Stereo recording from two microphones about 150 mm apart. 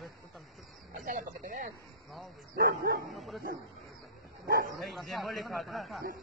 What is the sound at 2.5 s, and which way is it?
Speech, 90° right.